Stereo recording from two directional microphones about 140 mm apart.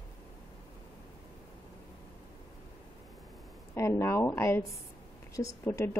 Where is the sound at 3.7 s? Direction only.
20° left (ahead or behind).